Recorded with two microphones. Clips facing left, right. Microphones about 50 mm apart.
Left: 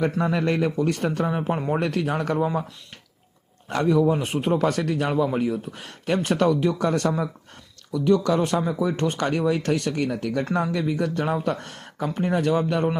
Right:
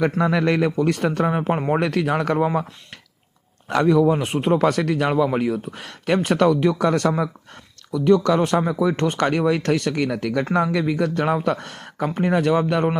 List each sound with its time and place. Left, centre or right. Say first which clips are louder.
0.0 s speech: right 3 dB; right
1.8 s speech: right 4 dB; right
3.7 s speech: right 3 dB; right
4.3 s speech: right 4 dB; right
7.9 s speech: right 3 dB; right
9.0 s speech: right 3 dB; right
9.9 s speech: right 3 dB; right